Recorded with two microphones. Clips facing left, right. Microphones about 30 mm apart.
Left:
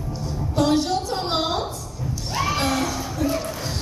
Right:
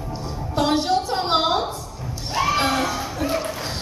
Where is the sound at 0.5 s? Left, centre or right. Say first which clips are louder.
Right 1 dB; right.